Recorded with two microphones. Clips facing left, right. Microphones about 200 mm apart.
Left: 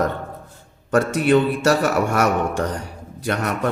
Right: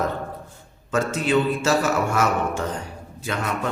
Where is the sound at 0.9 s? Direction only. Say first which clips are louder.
Left 5 dB; 55° left (ahead or behind).